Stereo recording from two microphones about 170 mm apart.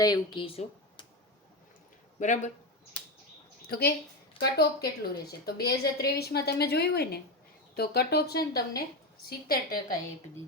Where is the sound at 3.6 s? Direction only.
65° left (ahead or behind).